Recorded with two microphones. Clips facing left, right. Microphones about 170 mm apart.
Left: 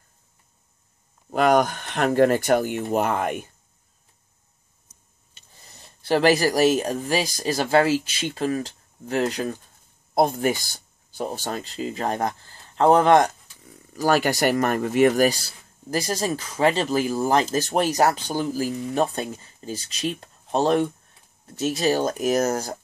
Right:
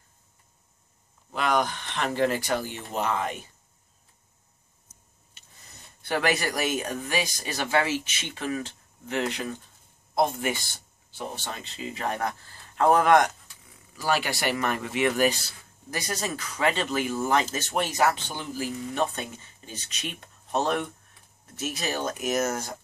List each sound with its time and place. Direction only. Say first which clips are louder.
1.3 s speech: left 7 dB; 45° left (ahead or behind)
5.6 s speech: left 2 dB; 30° left (ahead or behind)
13.9 s speech: left 7 dB; 45° left (ahead or behind)